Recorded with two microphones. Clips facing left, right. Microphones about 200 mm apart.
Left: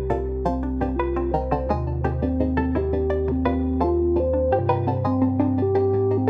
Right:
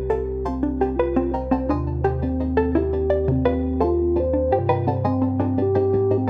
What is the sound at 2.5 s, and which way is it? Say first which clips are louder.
Music: right 3 dB; 40° right (ahead or behind).